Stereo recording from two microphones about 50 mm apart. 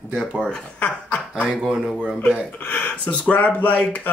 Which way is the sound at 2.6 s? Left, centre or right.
Left.